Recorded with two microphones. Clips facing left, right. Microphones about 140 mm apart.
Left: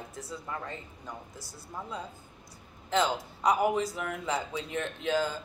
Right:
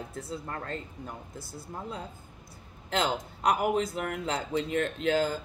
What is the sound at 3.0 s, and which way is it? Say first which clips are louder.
A woman's voice: even; 60° right (ahead or behind).